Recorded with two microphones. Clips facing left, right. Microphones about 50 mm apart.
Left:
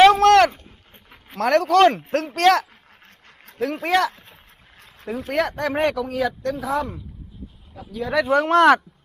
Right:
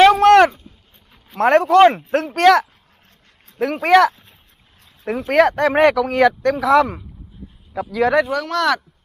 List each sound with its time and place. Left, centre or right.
0.0 s a sound: centre
1.4 s speech: right
5.3 s speech: right
8.3 s speech: left